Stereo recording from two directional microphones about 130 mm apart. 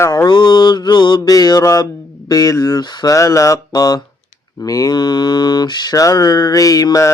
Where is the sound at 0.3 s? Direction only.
35° left (ahead or behind).